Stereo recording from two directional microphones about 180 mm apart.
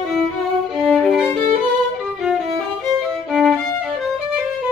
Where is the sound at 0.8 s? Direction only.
Centre (ahead or behind).